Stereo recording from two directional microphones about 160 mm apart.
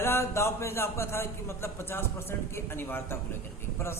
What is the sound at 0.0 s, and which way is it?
A man's voice, 15° left (ahead or behind).